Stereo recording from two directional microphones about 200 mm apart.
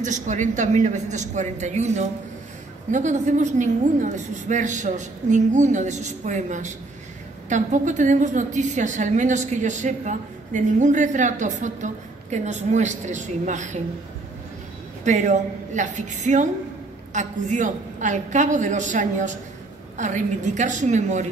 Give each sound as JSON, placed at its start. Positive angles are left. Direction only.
{"t": 0.0, "sound": "a woman's voice", "side_deg": -35}
{"t": 15.0, "sound": "a woman's voice", "side_deg": -35}